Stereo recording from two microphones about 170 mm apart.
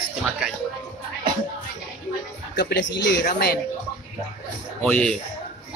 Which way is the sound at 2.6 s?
90° left.